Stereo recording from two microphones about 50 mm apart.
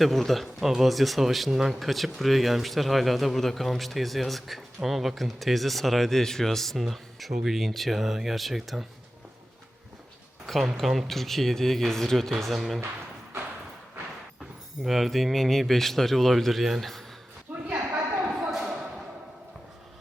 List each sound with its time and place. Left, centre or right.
0.0 s a man's voice: centre
1.5 s speech: centre
1.8 s a man's voice: centre
10.4 s a man's voice: centre
14.8 s a man's voice: centre
17.5 s a sound: right
18.3 s a sound: centre